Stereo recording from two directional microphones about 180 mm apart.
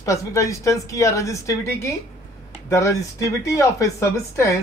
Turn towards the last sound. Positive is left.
turn(degrees=15)  # may be behind; listen again after turning